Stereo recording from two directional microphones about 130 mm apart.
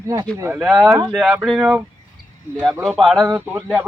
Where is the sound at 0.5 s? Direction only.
5° right (ahead or behind).